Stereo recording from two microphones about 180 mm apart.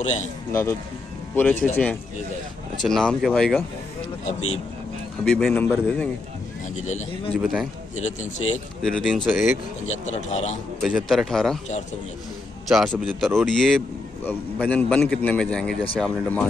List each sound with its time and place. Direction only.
0.0 s speech: 40° left (ahead or behind)
0.5 s a man's voice: 15° left (ahead or behind)
2.8 s a man's voice: 5° left (ahead or behind)
5.2 s a man's voice: 5° left (ahead or behind)
6.8 s speech: 40° left (ahead or behind)
7.3 s a man's voice: 5° right (ahead or behind)
8.0 s speech: 40° left (ahead or behind)
8.8 s a man's voice: centre (ahead or behind)
9.8 s speech: 35° left (ahead or behind)
10.8 s a man's voice: centre (ahead or behind)
12.6 s a man's voice: centre (ahead or behind)